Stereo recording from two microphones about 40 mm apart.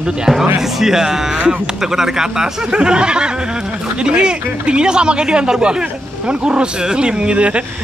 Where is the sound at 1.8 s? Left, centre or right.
Centre.